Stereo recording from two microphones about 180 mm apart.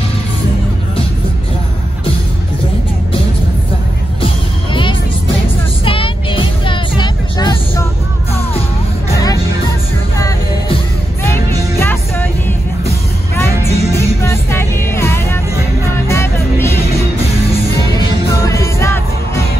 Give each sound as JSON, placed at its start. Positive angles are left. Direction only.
{"t": 5.9, "sound": "music", "side_deg": 30}
{"t": 11.8, "sound": "music", "side_deg": 10}
{"t": 13.6, "sound": "music", "side_deg": 15}
{"t": 18.4, "sound": "music", "side_deg": 15}